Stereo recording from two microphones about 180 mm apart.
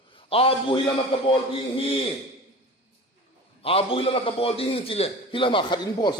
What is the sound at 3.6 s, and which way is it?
A man's voice, 30° left (ahead or behind).